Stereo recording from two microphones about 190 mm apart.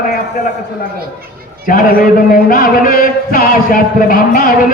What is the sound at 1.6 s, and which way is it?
Chant, 45° left (ahead or behind).